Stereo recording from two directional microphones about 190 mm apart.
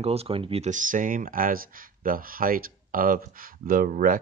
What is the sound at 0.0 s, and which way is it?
Speech, 30° right (ahead or behind).